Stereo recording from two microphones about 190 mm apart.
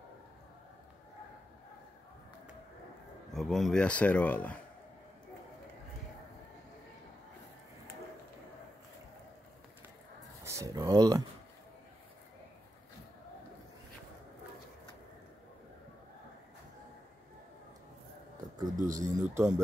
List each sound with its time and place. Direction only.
3.3 s speech: centre (ahead or behind)
10.4 s a sound: 15° right (ahead or behind)
18.7 s speech: 20° right (ahead or behind)